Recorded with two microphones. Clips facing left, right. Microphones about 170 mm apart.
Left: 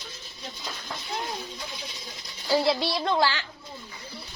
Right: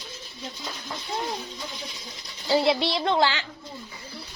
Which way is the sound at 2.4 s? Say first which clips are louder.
Right 2 dB; 20° right (ahead or behind).